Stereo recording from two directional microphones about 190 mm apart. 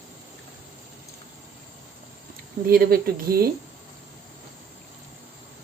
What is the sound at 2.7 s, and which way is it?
Speech, 55° right (ahead or behind).